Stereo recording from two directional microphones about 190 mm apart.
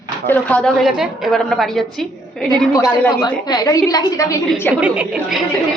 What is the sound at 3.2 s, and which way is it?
A woman's voice, 20° left (ahead or behind).